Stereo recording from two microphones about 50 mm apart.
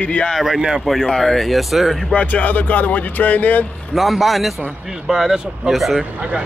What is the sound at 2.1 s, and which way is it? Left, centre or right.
Speech, left.